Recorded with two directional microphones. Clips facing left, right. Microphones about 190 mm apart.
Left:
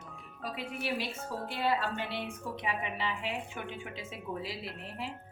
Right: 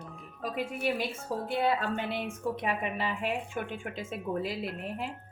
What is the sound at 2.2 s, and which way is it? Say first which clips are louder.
A woman's voice: right 5 dB; 50° right (ahead or behind).